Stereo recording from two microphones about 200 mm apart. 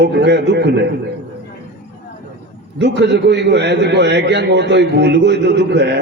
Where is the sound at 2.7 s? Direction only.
60° right (ahead or behind).